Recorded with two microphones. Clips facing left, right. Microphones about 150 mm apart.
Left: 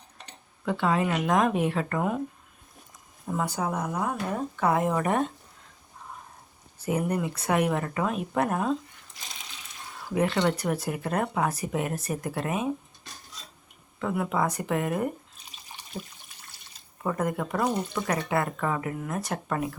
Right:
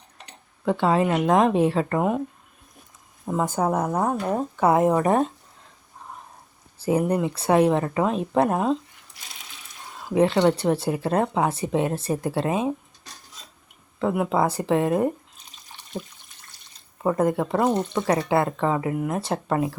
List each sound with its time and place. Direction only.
0.6 s speech: 30° right (ahead or behind)
3.4 s a woman's voice: 50° right (ahead or behind)
4.1 s speech: 35° right (ahead or behind)
4.5 s speech: 20° right (ahead or behind)
4.9 s speech: 35° right (ahead or behind)
6.7 s speech: 30° right (ahead or behind)
10.0 s speech: 25° right (ahead or behind)
14.1 s speech: 25° right (ahead or behind)
15.9 s a woman's voice: 50° right (ahead or behind)
17.0 s speech: 30° right (ahead or behind)